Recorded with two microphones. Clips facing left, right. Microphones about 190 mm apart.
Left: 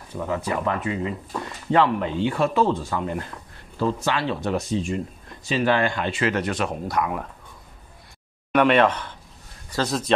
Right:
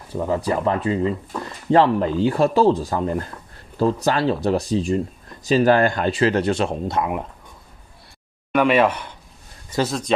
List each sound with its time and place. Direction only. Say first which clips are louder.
0.1 s speech: right 5 dB; 35° right (ahead or behind)
8.5 s speech: right 1 dB; centre (ahead or behind)
9.8 s speech: even; centre (ahead or behind)